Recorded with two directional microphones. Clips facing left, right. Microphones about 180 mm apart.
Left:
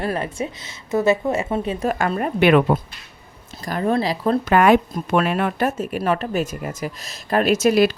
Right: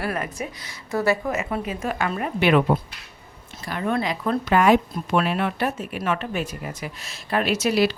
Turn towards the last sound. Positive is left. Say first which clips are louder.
# left 5 dB
turn(degrees=50)  # may be behind; listen again after turning